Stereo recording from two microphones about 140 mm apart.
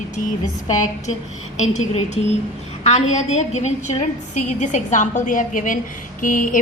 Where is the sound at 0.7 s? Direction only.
60° left (ahead or behind).